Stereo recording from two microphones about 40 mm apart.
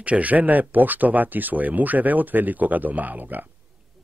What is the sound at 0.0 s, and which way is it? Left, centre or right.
Speech, right.